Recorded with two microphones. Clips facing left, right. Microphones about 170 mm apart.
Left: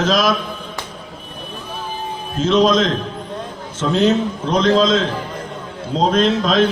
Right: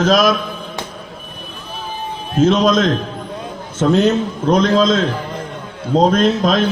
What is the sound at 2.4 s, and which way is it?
A man's voice, 50° right (ahead or behind).